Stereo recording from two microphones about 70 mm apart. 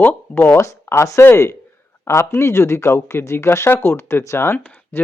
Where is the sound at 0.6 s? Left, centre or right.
Left.